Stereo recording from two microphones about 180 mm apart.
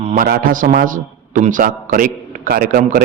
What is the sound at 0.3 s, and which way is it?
A man's voice, 50° right (ahead or behind).